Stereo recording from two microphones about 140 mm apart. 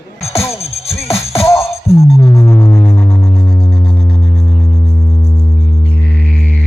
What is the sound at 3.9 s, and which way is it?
Music, 45° left (ahead or behind).